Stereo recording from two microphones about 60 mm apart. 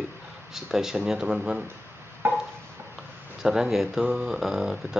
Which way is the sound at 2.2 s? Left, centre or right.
Right.